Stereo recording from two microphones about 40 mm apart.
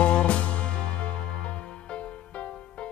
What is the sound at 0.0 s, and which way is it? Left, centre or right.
Music, left.